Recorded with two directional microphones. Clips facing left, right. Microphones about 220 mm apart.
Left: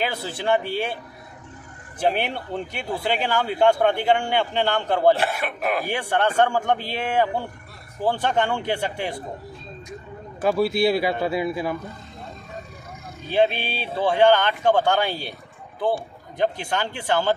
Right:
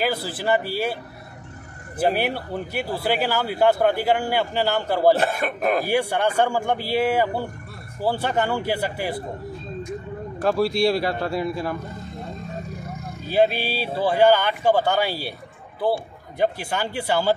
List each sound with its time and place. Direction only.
0.0 s a man's voice: 5° right (ahead or behind)
2.0 s speech: 5° right (ahead or behind)
5.2 s speech: 45° right (ahead or behind)
5.9 s speech: 10° right (ahead or behind)
10.4 s a man's voice: 5° left (ahead or behind)
13.3 s speech: 5° right (ahead or behind)
16.3 s speech: 10° right (ahead or behind)